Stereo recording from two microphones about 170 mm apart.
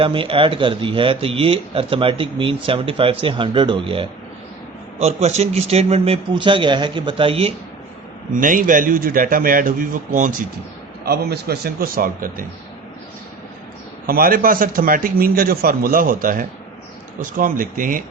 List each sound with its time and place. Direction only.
0.0 s speech: 30° right (ahead or behind)
8.3 s a man's voice: 50° right (ahead or behind)
11.0 s a man's voice: 65° right (ahead or behind)
14.1 s a man's voice: 60° right (ahead or behind)